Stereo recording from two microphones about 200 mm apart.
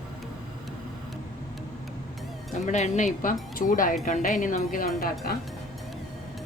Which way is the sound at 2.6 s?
35° left (ahead or behind).